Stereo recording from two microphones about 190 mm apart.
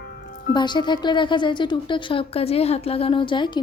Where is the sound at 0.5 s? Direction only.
25° left (ahead or behind).